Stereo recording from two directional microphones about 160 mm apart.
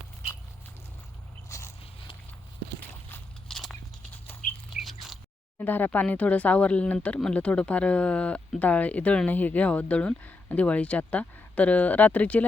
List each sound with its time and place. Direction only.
1.5 s walk: 20° left (ahead or behind)
3.1 s biting: 5° left (ahead or behind)
4.7 s a sound: centre (ahead or behind)
5.5 s speech: 10° left (ahead or behind)